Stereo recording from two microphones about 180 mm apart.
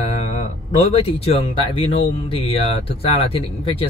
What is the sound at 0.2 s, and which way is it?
Speech, 40° left (ahead or behind).